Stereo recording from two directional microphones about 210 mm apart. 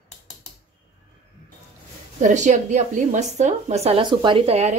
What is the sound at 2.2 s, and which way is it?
A woman's voice, 35° right (ahead or behind).